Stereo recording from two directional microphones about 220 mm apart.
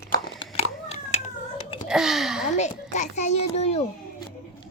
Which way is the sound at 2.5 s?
30° left (ahead or behind).